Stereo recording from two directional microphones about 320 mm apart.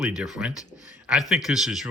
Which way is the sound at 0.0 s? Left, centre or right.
Centre.